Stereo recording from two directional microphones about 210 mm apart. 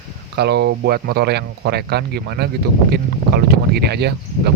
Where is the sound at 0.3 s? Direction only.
50° right (ahead or behind).